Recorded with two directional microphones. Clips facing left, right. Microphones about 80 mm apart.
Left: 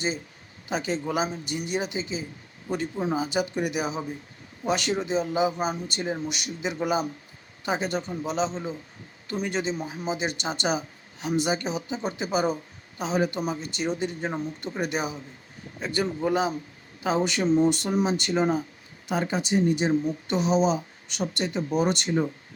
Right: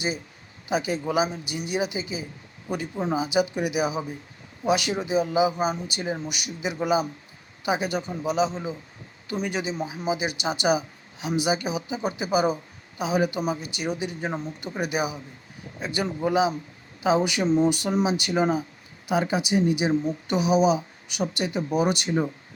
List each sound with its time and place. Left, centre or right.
0.7 s speech: centre
17.5 s speech: centre